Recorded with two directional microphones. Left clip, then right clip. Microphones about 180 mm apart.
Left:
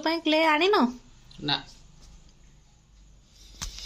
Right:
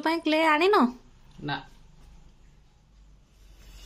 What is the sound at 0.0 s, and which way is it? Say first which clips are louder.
Speech: even; centre (ahead or behind).